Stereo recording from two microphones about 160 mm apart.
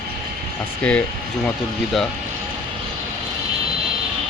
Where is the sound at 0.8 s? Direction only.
10° left (ahead or behind).